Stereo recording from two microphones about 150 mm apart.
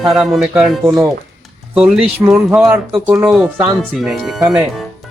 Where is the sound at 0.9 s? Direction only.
20° right (ahead or behind).